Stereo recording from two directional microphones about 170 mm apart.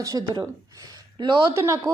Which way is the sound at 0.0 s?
20° right (ahead or behind).